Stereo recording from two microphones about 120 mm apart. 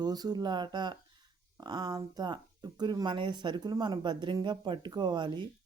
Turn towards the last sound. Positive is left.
turn(degrees=-40)  # may be behind; listen again after turning